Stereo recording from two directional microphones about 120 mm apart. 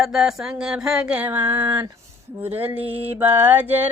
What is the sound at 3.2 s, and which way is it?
Mantra, 20° right (ahead or behind).